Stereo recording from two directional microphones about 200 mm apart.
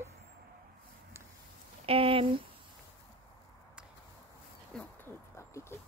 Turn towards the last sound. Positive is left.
turn(degrees=15)  # may be behind; listen again after turning